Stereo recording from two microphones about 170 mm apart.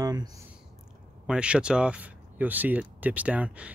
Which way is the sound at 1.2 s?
5° right (ahead or behind).